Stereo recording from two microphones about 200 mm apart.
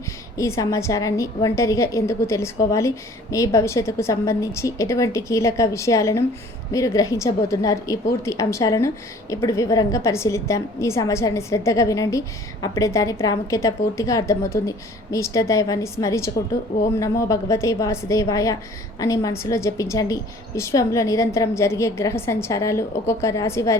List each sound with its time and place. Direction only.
0.3 s a woman's voice: 15° left (ahead or behind)